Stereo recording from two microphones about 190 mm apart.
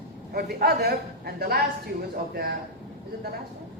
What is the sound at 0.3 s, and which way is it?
A woman's voice, 55° right (ahead or behind).